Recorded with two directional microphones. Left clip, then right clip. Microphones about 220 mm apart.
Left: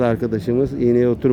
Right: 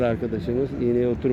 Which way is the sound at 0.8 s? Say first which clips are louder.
Left 6 dB; 35° left (ahead or behind).